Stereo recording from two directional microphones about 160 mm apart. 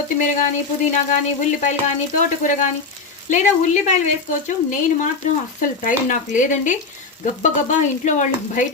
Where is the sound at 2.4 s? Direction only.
55° left (ahead or behind).